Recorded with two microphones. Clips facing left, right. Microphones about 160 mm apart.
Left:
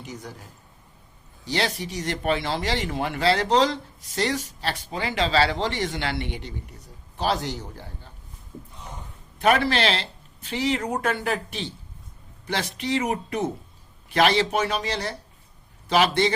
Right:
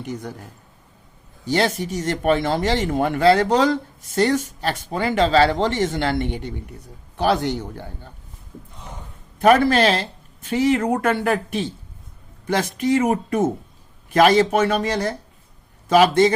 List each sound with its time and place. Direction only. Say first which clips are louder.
0.0 s speech: right 7 dB; 55° right (ahead or behind)
1.5 s speech: right 6 dB; 45° right (ahead or behind)
7.2 s speech: right 6 dB; 60° right (ahead or behind)
9.4 s speech: right 6 dB; 45° right (ahead or behind)